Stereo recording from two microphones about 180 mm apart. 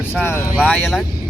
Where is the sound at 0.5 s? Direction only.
5° right (ahead or behind).